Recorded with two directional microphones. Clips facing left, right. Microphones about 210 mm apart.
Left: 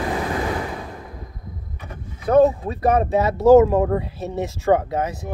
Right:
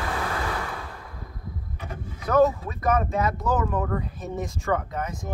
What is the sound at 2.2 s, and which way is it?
Speech, 30° left (ahead or behind).